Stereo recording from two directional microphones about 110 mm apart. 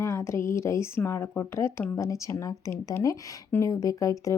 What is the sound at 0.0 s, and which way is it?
A woman's voice, 25° left (ahead or behind).